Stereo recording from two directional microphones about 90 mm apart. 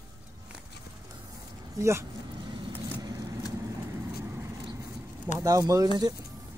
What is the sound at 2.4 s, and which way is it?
Vehicle, 60° right (ahead or behind).